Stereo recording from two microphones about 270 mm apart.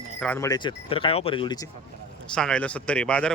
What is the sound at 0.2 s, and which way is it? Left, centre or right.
Speech, centre.